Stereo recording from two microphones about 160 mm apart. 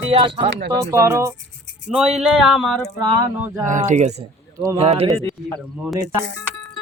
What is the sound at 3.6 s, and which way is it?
Speech, 50° right (ahead or behind).